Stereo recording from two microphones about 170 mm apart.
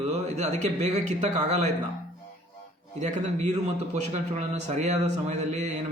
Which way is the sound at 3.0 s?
45° right (ahead or behind).